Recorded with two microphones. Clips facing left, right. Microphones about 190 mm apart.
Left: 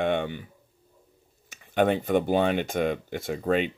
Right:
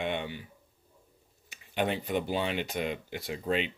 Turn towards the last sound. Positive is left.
turn(degrees=50)  # may be behind; listen again after turning